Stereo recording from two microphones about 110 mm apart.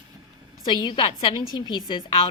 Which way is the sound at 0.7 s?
40° left (ahead or behind).